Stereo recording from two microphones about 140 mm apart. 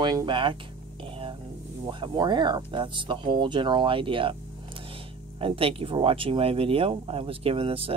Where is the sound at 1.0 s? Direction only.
35° right (ahead or behind).